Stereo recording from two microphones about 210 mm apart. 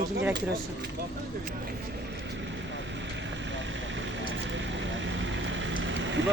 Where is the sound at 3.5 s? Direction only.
60° right (ahead or behind).